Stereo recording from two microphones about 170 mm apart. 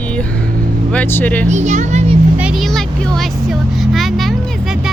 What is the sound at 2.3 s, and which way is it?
Vehicle, 5° right (ahead or behind).